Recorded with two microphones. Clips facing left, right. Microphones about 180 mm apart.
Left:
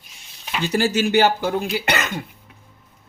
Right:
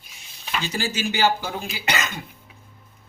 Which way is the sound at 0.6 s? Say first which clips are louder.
Left 8 dB; 65° left (ahead or behind).